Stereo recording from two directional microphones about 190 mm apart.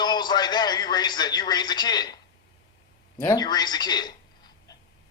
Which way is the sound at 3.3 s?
20° left (ahead or behind).